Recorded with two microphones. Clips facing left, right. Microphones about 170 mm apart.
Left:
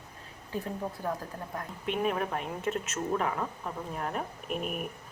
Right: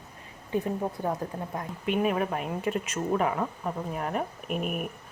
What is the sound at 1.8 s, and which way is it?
Speech, 5° right (ahead or behind).